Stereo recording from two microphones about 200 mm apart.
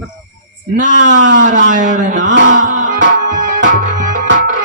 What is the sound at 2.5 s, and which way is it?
Music, 40° right (ahead or behind).